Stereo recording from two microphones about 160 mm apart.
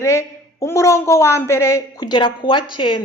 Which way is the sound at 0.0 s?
20° left (ahead or behind).